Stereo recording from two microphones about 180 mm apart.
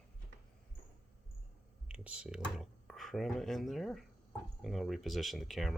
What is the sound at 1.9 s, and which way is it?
Speech, 5° right (ahead or behind).